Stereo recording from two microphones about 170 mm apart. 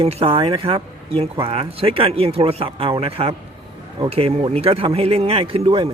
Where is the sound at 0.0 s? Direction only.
35° right (ahead or behind).